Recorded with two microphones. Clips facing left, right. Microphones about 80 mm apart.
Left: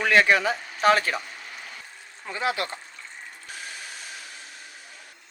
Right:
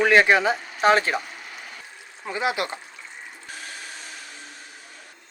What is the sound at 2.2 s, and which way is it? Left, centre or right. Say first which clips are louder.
Speech: right 2 dB; centre.